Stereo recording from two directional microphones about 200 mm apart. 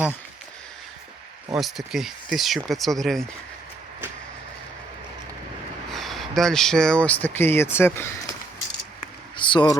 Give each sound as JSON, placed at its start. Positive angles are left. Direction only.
{"t": 1.5, "sound": "speech", "side_deg": 0}
{"t": 5.9, "sound": "speech", "side_deg": 0}
{"t": 9.3, "sound": "a sound", "side_deg": 25}